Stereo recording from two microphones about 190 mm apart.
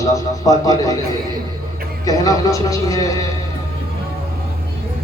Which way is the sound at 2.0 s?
20° left (ahead or behind).